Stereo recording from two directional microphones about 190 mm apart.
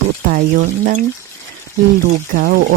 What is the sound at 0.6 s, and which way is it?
Speech, 40° right (ahead or behind).